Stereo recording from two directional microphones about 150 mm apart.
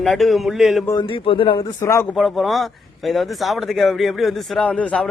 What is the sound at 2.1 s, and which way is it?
Speech, centre (ahead or behind).